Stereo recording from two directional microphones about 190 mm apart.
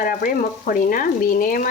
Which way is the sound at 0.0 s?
45° left (ahead or behind).